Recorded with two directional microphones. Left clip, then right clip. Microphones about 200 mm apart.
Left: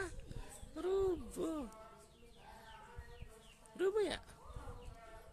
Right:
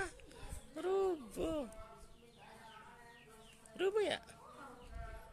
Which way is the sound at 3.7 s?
10° left (ahead or behind).